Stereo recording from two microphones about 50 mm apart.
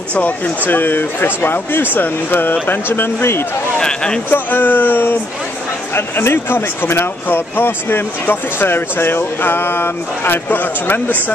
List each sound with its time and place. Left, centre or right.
0.7 s speech: left
3.7 s speech: centre
4.3 s speech: left